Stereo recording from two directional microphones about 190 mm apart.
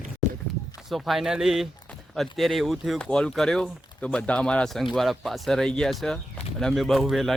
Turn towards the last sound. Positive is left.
turn(degrees=0)  # may be behind; listen again after turning